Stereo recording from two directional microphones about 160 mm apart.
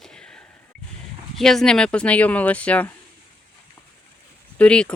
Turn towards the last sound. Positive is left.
turn(degrees=5)  # may be behind; listen again after turning